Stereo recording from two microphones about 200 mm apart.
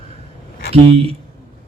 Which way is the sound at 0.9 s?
30° right (ahead or behind).